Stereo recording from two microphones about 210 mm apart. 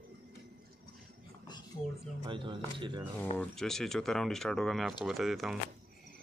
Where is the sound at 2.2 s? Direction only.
25° right (ahead or behind).